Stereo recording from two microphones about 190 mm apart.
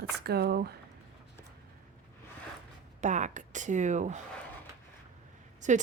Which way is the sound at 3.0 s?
40° right (ahead or behind).